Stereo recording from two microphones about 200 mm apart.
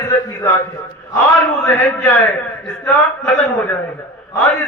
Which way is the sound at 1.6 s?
10° left (ahead or behind).